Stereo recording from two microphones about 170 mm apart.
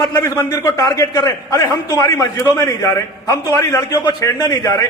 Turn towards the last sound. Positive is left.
turn(degrees=20)  # may be behind; listen again after turning